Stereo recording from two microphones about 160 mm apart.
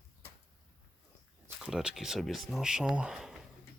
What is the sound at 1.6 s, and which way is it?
Speech, 5° right (ahead or behind).